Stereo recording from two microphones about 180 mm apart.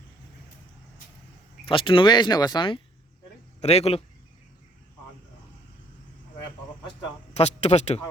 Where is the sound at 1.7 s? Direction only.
30° left (ahead or behind).